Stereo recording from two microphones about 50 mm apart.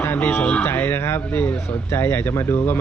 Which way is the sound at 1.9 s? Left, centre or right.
Left.